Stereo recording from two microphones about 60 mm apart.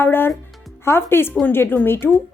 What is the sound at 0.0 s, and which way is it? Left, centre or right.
Music, left.